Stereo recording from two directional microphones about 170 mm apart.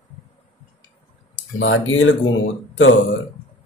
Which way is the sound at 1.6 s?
90° left.